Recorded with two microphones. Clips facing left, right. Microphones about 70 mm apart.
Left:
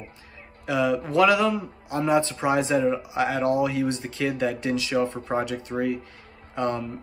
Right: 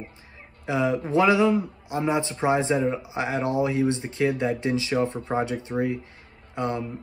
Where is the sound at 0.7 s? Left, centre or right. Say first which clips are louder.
Left 1 dB; right.